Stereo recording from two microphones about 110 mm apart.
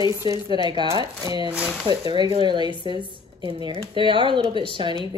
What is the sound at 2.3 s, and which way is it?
Speech, 50° right (ahead or behind).